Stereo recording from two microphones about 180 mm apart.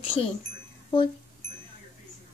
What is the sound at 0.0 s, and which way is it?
Speech, 30° left (ahead or behind).